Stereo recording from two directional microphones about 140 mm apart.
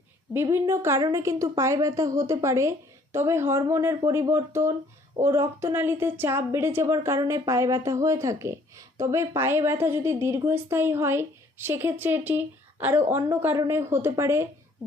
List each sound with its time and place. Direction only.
0.3 s a woman's voice: 20° right (ahead or behind)